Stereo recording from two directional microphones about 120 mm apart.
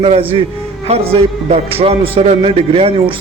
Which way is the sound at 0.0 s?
50° right (ahead or behind).